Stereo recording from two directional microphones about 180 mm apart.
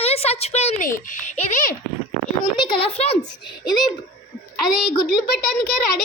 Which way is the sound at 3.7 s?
Centre (ahead or behind).